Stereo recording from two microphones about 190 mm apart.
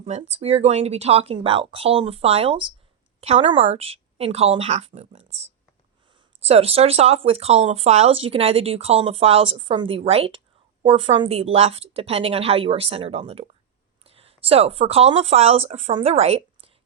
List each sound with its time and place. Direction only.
0.0 s a woman's voice: 35° right (ahead or behind)